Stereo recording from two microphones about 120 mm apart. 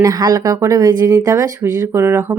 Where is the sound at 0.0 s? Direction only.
35° right (ahead or behind).